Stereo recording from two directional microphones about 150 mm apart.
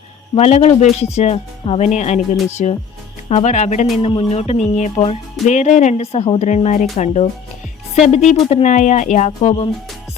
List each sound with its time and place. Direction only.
0.3 s speech: 45° left (ahead or behind)